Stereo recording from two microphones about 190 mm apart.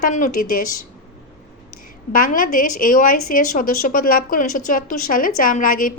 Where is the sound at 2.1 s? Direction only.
45° left (ahead or behind).